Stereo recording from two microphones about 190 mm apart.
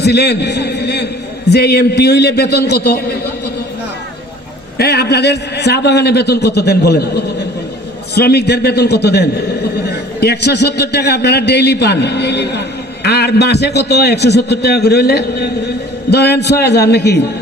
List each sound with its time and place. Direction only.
0.0 s a man's voice: 60° left (ahead or behind)
4.8 s a man's voice: 60° left (ahead or behind)
8.1 s a man's voice: 55° left (ahead or behind)